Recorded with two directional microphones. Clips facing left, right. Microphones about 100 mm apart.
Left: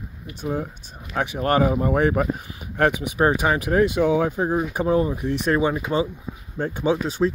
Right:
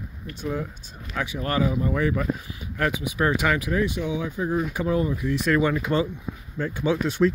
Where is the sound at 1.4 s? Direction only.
45° left (ahead or behind).